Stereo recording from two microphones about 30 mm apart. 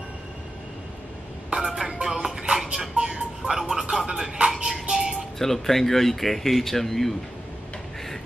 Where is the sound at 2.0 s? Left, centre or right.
Right.